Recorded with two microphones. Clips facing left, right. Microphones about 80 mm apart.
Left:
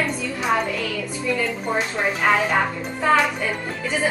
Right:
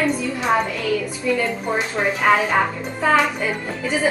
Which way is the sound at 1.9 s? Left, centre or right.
Centre.